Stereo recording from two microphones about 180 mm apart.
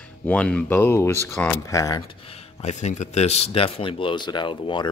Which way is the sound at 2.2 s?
40° left (ahead or behind).